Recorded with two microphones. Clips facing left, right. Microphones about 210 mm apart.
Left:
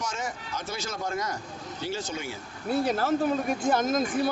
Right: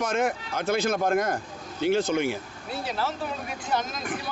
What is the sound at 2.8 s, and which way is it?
Speech, 50° left (ahead or behind).